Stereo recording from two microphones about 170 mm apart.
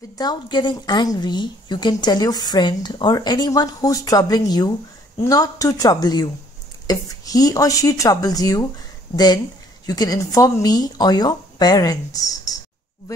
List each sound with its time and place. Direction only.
0.2 s a woman's voice: 25° left (ahead or behind)